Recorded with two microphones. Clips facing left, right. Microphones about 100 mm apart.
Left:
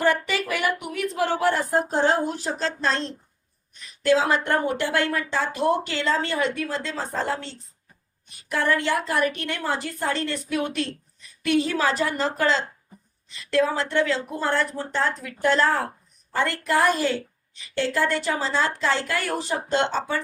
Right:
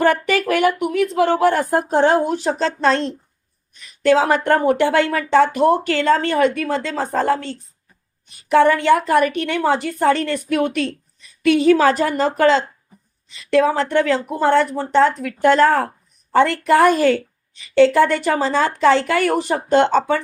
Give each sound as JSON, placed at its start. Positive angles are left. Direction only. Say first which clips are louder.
{"t": 0.0, "sound": "speech", "louder": "right 6 dB", "side_deg": -55}
{"t": 0.8, "sound": "a woman's voice", "louder": "right 8 dB", "side_deg": -70}
{"t": 8.4, "sound": "speech", "louder": "right 10 dB", "side_deg": -75}
{"t": 11.4, "sound": "a woman's voice", "louder": "right 9 dB", "side_deg": -70}
{"t": 15.4, "sound": "speech", "louder": "right 7 dB", "side_deg": -60}
{"t": 17.7, "sound": "speech", "louder": "right 11 dB", "side_deg": -70}